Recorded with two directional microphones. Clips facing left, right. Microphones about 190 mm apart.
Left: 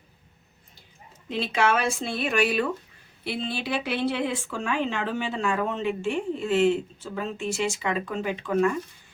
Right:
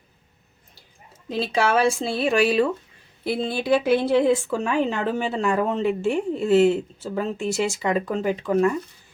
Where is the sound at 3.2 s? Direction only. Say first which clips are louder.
Right 6 dB; 45° right (ahead or behind).